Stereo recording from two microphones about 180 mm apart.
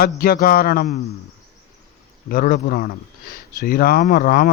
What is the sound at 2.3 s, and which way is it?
Speech, 50° left (ahead or behind).